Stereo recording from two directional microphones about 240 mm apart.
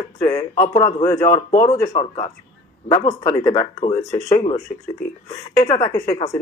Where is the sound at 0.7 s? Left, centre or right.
Left.